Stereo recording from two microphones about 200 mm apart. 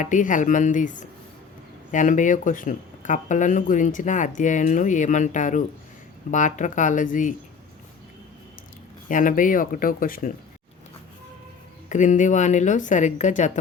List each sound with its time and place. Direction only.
0.0 s speech: 40° left (ahead or behind)
9.0 s speech: 40° left (ahead or behind)
11.9 s speech: 40° left (ahead or behind)